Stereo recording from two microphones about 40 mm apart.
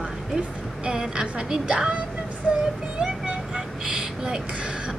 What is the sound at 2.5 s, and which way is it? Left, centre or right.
Child singing, right.